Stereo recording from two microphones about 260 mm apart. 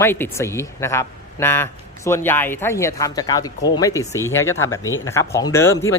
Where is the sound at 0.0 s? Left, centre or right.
Centre.